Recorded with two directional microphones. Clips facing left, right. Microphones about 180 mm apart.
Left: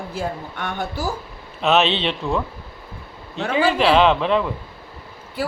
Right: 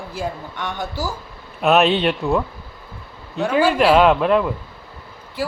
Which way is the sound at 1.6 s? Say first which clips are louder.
Right 3 dB; 10° right (ahead or behind).